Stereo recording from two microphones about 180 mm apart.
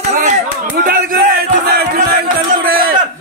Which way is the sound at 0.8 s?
50° right (ahead or behind).